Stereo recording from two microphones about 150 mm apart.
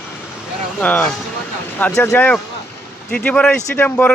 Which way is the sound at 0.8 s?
10° left (ahead or behind).